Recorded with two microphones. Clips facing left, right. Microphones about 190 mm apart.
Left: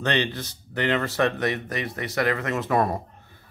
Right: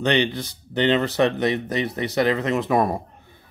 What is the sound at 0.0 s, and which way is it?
Speech, 15° right (ahead or behind).